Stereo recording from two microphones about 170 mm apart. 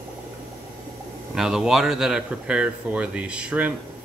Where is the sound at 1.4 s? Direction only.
Centre (ahead or behind).